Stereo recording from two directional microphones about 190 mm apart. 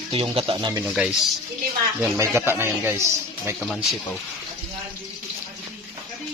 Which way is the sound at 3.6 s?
Centre (ahead or behind).